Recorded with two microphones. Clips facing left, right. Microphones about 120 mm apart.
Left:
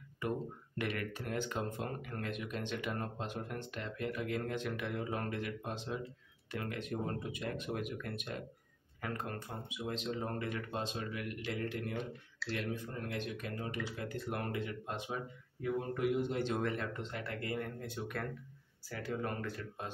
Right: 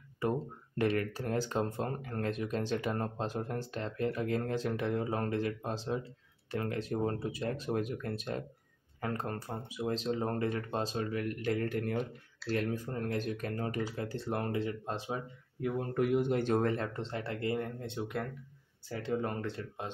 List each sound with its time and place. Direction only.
0.2 s speech: 35° right (ahead or behind)
15.6 s speech: 60° right (ahead or behind); by 19.9 s 25° right (ahead or behind)